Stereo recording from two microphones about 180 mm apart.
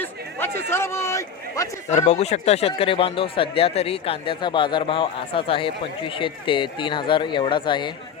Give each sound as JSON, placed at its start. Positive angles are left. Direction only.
{"t": 0.0, "sound": "a man's voice", "side_deg": 10}
{"t": 2.0, "sound": "speech", "side_deg": 40}